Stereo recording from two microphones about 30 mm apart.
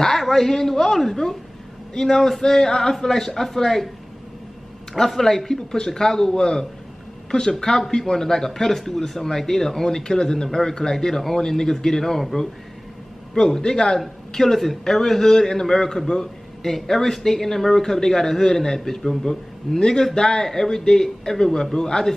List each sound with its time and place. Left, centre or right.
0.2 s a man's voice: centre
4.9 s speech: centre
5.8 s a man's voice: centre
7.5 s a man's voice: centre